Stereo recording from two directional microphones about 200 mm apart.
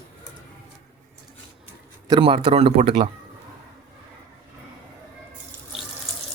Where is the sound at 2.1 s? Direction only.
25° right (ahead or behind).